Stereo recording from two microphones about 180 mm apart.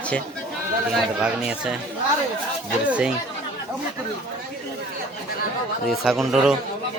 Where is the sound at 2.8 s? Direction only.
5° right (ahead or behind).